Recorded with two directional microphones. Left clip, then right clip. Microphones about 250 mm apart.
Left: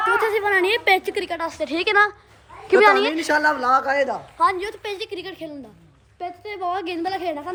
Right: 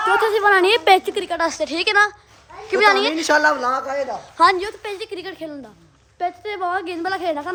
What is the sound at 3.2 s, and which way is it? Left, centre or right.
A woman's voice, centre.